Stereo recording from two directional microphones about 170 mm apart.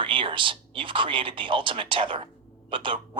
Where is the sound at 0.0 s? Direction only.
30° right (ahead or behind).